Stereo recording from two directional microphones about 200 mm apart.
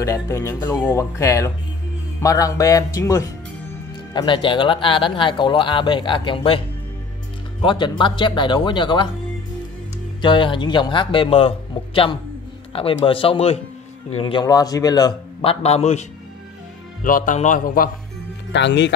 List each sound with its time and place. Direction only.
0.0 s speech: 15° left (ahead or behind)
7.6 s speech: 20° left (ahead or behind)
10.2 s speech: 25° left (ahead or behind)
15.6 s a man's voice: 30° left (ahead or behind)
18.5 s speech: 60° left (ahead or behind)